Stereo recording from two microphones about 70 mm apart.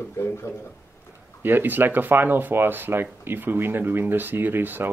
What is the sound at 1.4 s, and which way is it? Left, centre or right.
Speech, right.